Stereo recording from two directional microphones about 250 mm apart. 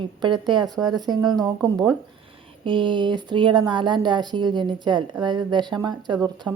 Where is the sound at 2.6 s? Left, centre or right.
Centre.